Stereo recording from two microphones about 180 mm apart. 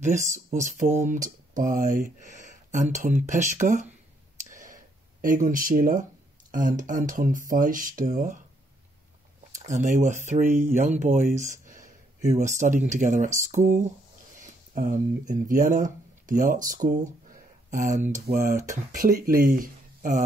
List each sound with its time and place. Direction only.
0.0 s speech: 45° right (ahead or behind)
4.5 s clicking: 45° right (ahead or behind)
5.2 s speech: 45° right (ahead or behind)
9.8 s speech: 40° right (ahead or behind)